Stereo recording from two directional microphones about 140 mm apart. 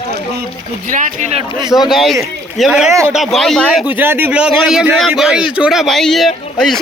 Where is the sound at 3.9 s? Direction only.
15° right (ahead or behind).